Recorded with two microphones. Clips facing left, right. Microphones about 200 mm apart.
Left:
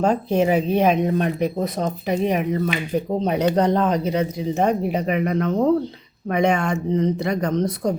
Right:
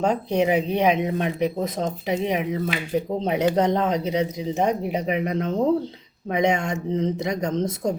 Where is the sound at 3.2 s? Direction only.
20° right (ahead or behind).